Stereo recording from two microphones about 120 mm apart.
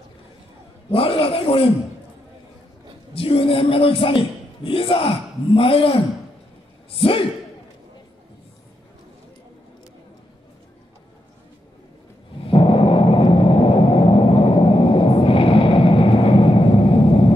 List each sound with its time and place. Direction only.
0.9 s speech: 50° left (ahead or behind)
3.2 s a man's voice: 50° left (ahead or behind)
12.4 s gong: 50° left (ahead or behind)